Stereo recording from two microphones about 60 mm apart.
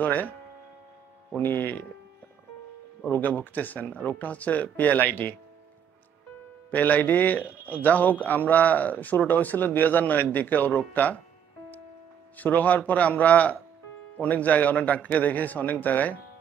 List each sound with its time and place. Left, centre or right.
0.0 s speech: left
1.4 s speech: left
3.0 s speech: left
6.7 s speech: left
12.4 s speech: left